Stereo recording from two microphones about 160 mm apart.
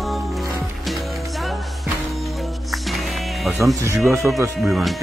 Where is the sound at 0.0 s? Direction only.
Centre (ahead or behind).